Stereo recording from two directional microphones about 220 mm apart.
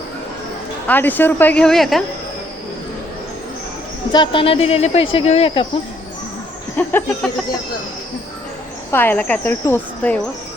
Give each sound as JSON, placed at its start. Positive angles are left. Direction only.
{"t": 0.9, "sound": "speech", "side_deg": 10}
{"t": 4.1, "sound": "speech", "side_deg": 20}
{"t": 6.7, "sound": "speech", "side_deg": 10}
{"t": 8.9, "sound": "speech", "side_deg": 10}